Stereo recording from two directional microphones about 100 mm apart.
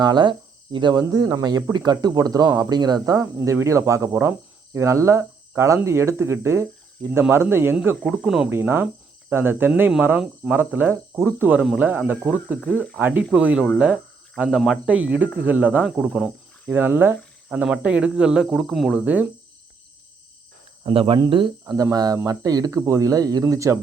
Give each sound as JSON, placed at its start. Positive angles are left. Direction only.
{"t": 0.0, "sound": "speech", "side_deg": -45}
{"t": 0.9, "sound": "speech", "side_deg": -35}
{"t": 7.9, "sound": "speech", "side_deg": 5}
{"t": 8.4, "sound": "speech", "side_deg": -20}
{"t": 12.7, "sound": "speech", "side_deg": 10}
{"t": 13.0, "sound": "speech", "side_deg": -20}
{"t": 16.0, "sound": "cricket", "side_deg": -5}
{"t": 16.7, "sound": "speech", "side_deg": -20}
{"t": 19.0, "sound": "speech", "side_deg": -15}
{"t": 20.8, "sound": "speech", "side_deg": -60}
{"t": 21.7, "sound": "speech", "side_deg": -35}